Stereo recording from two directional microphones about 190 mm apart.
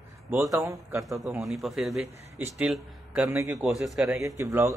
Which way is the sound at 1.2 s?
Centre (ahead or behind).